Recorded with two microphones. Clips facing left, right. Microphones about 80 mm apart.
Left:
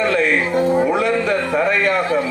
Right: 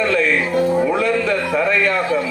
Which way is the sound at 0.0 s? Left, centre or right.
Left.